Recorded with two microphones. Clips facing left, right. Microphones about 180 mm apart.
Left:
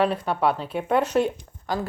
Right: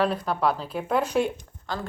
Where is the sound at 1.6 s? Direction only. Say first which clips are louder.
Left 5 dB; 10° left (ahead or behind).